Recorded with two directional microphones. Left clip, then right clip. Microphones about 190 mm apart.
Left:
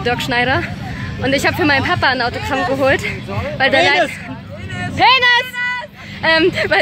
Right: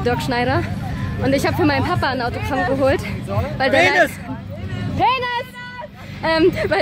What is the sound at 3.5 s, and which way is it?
Speech, 15° right (ahead or behind).